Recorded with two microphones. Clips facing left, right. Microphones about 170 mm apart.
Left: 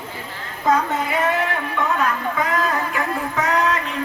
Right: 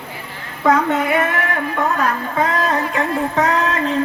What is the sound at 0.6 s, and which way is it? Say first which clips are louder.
Speech: right 4 dB; 65° right (ahead or behind).